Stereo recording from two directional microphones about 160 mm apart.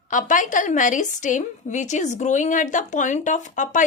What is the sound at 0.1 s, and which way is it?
A woman's voice, 55° left (ahead or behind).